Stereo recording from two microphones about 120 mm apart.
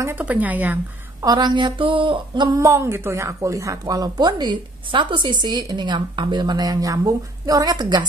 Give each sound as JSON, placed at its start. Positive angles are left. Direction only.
{"t": 0.0, "sound": "speech", "side_deg": -15}
{"t": 1.2, "sound": "speech", "side_deg": -35}
{"t": 2.6, "sound": "speech", "side_deg": -25}